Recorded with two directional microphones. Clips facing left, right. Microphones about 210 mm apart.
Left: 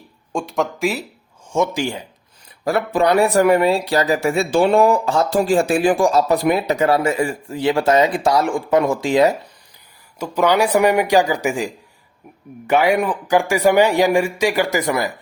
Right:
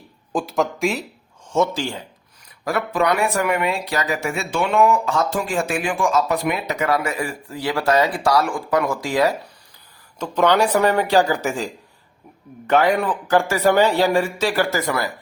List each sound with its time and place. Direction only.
0.3 s speech: centre (ahead or behind)
1.5 s speech: 15° left (ahead or behind)
2.6 s speech: 30° left (ahead or behind)
10.2 s speech: 10° left (ahead or behind)